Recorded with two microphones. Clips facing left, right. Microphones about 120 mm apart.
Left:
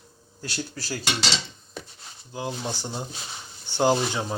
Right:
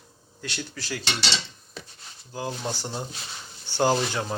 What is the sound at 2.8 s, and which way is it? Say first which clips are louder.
Speech: even; 10° left (ahead or behind).